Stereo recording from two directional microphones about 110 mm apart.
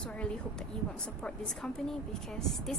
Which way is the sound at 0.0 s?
10° left (ahead or behind).